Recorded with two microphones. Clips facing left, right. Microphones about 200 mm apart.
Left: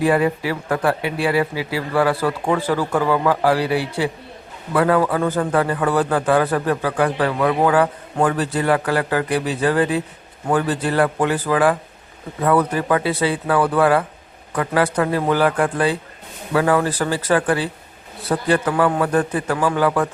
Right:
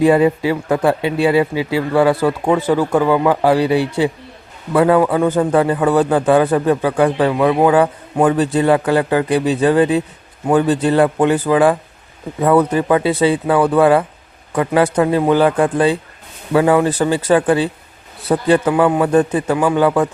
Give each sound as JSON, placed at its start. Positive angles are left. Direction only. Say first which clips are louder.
{"t": 0.0, "sound": "a man's voice", "louder": "right 5 dB", "side_deg": -25}